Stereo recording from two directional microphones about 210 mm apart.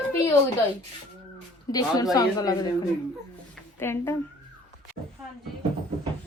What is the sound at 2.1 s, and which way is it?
Speech, 15° left (ahead or behind).